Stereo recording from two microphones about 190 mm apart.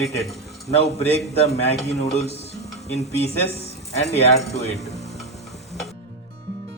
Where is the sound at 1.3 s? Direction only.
35° left (ahead or behind).